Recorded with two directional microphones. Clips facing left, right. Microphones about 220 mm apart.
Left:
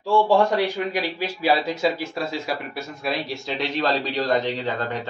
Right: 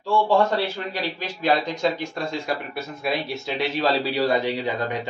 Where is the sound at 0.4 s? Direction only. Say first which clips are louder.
Left 2 dB; 15° left (ahead or behind).